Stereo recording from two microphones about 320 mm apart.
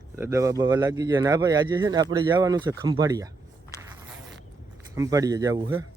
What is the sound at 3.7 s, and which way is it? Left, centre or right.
Insect, centre.